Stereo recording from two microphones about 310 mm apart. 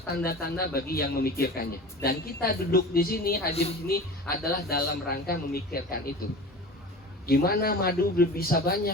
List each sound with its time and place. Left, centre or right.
0.2 s a woman's voice: left
7.3 s a woman's voice: left